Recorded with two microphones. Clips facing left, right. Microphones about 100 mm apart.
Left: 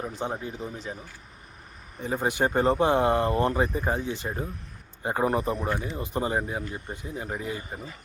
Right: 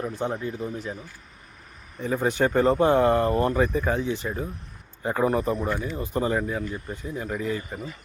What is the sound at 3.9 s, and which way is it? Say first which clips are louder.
Speech: right 4 dB; 60° right (ahead or behind).